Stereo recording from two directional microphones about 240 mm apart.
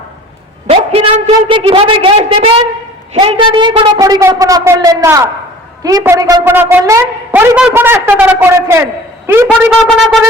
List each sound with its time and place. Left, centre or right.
0.7 s a woman's voice: right; by 10.2 s centre